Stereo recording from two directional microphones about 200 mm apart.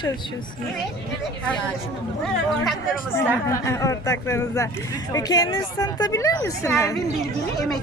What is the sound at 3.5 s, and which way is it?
Speech, 15° left (ahead or behind).